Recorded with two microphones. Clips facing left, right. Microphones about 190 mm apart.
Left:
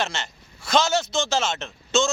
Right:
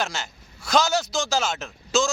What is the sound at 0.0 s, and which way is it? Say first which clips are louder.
A man's voice: left 1 dB; centre (ahead or behind).